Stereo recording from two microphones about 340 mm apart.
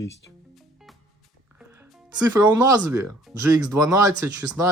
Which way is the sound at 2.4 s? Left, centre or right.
Centre.